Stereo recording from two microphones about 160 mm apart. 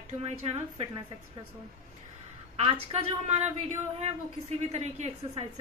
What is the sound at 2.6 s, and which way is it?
Speech, 40° right (ahead or behind).